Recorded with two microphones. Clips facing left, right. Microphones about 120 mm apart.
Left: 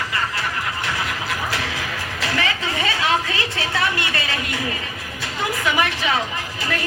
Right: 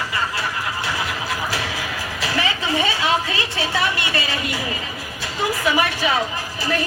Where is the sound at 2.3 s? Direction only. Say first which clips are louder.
Right 3 dB; 30° right (ahead or behind).